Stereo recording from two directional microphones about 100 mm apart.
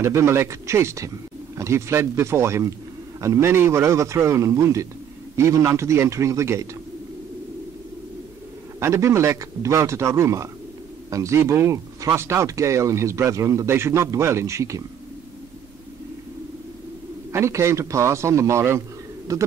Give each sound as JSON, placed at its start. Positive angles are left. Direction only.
{"t": 0.0, "sound": "a man's voice", "side_deg": -30}
{"t": 8.7, "sound": "speech", "side_deg": -30}
{"t": 17.3, "sound": "a man's voice", "side_deg": -30}